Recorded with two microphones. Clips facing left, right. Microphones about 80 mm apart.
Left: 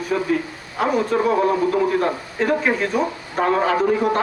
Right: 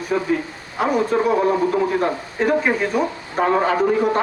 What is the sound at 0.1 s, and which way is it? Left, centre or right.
A man's voice, centre.